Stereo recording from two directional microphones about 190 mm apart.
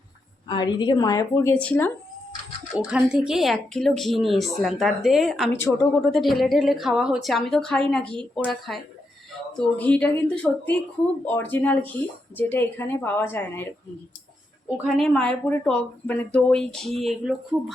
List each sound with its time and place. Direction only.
0.4 s speech: 25° left (ahead or behind)
2.7 s speech: 5° right (ahead or behind)
5.5 s a woman's voice: 10° left (ahead or behind)
14.9 s speech: 5° left (ahead or behind)